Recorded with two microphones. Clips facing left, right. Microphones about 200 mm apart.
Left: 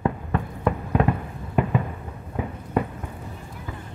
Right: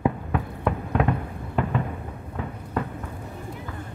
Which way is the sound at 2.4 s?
15° left (ahead or behind).